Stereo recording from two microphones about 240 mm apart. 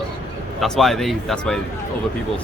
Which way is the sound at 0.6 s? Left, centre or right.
Centre.